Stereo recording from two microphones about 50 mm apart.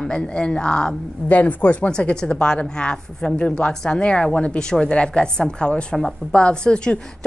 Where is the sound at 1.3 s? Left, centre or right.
Left.